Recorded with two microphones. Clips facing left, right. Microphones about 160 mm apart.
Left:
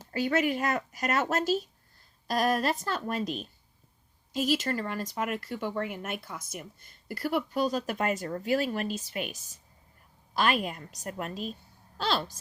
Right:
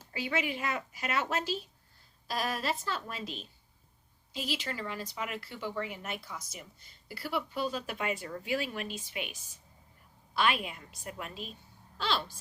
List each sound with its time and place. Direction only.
0.1 s a woman's voice: 45° left (ahead or behind)